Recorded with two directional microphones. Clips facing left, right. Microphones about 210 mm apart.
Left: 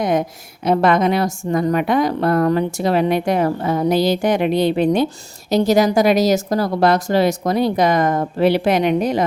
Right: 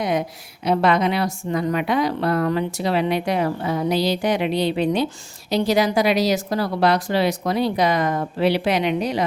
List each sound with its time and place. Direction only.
0.0 s a woman's voice: 50° left (ahead or behind)